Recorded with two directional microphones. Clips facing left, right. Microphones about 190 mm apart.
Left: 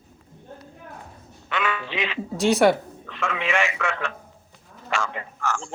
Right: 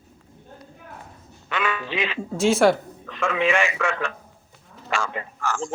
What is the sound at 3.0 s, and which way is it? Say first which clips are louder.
Speech: right 5 dB; 40° right (ahead or behind).